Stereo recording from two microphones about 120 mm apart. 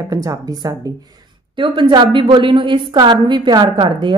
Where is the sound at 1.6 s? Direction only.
45° right (ahead or behind).